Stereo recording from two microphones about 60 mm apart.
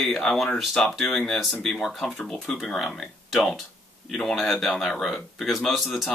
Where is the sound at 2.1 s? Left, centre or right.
Centre.